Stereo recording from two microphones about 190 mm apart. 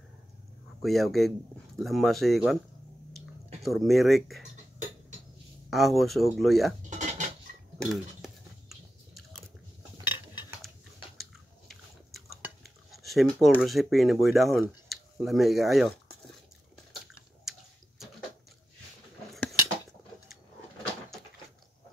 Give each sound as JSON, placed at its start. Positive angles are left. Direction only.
{"t": 0.8, "sound": "speech", "side_deg": 0}
{"t": 3.6, "sound": "speech", "side_deg": 0}
{"t": 5.7, "sound": "speech", "side_deg": 0}
{"t": 6.9, "sound": "dishes", "side_deg": -40}
{"t": 7.8, "sound": "cutlery", "side_deg": 0}
{"t": 11.7, "sound": "chewing", "side_deg": 0}
{"t": 17.5, "sound": "a sound", "side_deg": 0}